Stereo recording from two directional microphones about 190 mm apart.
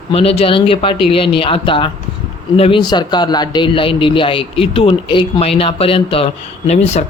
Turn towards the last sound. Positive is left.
turn(degrees=35)  # may be behind; listen again after turning